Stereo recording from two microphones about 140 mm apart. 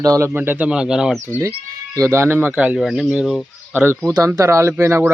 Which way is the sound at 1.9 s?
20° right (ahead or behind).